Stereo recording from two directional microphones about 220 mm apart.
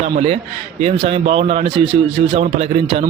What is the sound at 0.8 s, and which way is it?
Speech, 30° right (ahead or behind).